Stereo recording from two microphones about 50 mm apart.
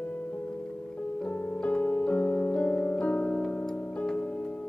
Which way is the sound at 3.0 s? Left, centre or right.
Left.